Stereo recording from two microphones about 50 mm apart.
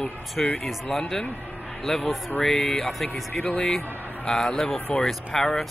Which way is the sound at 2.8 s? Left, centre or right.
Centre.